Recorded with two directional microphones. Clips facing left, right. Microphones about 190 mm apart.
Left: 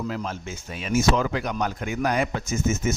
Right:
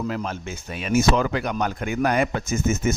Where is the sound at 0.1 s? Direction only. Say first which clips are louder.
Right 2 dB; 60° right (ahead or behind).